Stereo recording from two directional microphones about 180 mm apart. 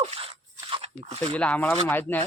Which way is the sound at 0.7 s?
35° right (ahead or behind).